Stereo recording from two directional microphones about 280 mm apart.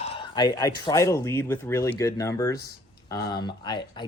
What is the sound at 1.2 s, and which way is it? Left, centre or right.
Speech, centre.